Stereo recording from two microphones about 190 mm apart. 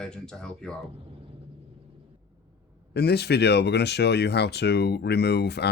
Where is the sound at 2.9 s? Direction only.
60° left (ahead or behind).